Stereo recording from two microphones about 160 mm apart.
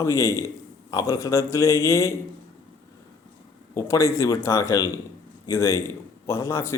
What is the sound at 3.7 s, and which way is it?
A man's voice, 20° left (ahead or behind).